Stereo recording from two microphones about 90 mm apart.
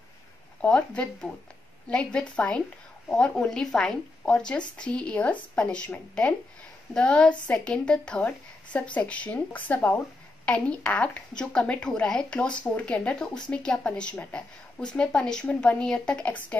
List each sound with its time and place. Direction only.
0.6 s a woman's voice: 10° left (ahead or behind)